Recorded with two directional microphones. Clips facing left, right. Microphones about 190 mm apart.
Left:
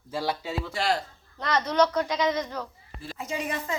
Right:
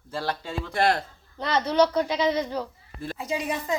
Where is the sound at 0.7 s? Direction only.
55° right (ahead or behind).